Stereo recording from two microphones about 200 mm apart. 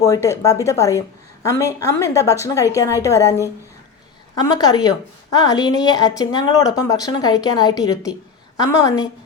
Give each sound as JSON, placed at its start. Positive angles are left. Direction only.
{"t": 0.0, "sound": "a woman's voice", "side_deg": 15}